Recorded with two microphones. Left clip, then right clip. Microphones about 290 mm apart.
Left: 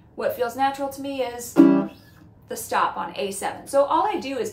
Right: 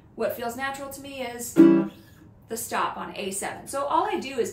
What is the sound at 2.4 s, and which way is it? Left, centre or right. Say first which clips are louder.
A woman's voice: left 5 dB; centre.